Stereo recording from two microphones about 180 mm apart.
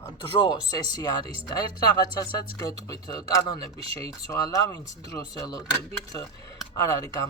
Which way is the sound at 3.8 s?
30° right (ahead or behind).